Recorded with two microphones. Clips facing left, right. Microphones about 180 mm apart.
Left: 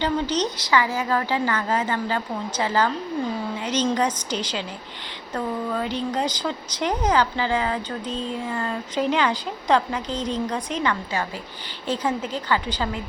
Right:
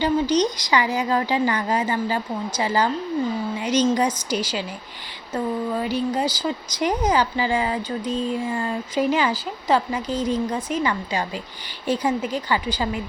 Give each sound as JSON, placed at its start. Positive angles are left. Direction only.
{"t": 0.0, "sound": "speech", "side_deg": -10}